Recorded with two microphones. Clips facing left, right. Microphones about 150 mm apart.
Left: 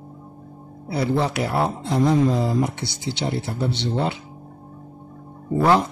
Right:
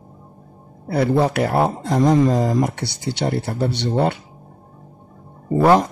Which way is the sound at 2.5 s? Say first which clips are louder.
Right 2 dB; 60° right (ahead or behind).